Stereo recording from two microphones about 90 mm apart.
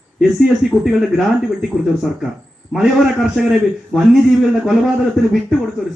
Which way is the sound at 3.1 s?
5° right (ahead or behind).